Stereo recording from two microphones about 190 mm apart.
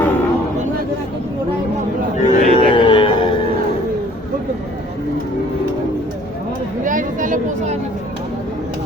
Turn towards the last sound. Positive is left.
turn(degrees=-45)  # may be behind; listen again after turning